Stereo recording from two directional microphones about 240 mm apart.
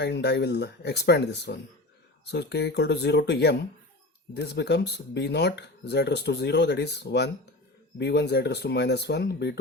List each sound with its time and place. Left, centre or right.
0.0 s speech: left